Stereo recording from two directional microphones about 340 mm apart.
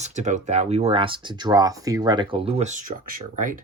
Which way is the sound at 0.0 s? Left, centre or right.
Right.